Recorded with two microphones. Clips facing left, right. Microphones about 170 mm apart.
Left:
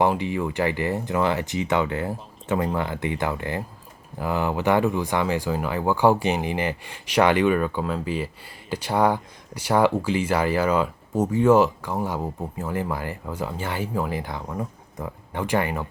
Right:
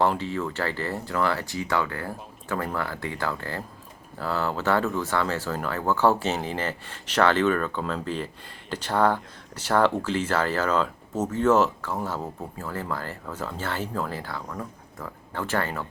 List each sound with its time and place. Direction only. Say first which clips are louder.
0.0 s speech: left 2 dB; 15° left (ahead or behind)